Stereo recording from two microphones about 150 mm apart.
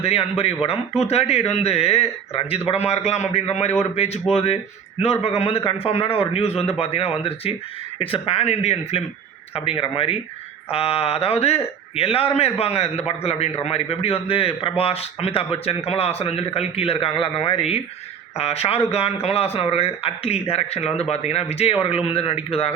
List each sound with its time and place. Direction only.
0.0 s a man's voice: 40° left (ahead or behind)
17.6 s a man's voice: 40° left (ahead or behind)